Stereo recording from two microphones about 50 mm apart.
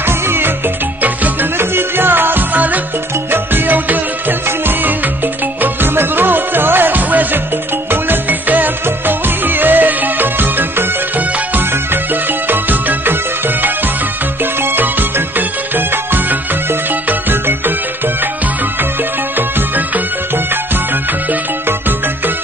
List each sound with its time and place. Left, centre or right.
0.0 s music: right
1.0 s music: right
1.6 s music: right